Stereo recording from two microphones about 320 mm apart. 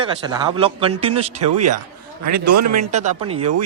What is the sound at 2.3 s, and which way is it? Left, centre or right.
Speech, right.